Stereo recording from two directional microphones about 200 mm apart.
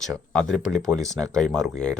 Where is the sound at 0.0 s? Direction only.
Centre (ahead or behind).